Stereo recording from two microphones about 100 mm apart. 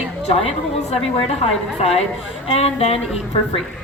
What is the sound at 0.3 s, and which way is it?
Speech, 90° left.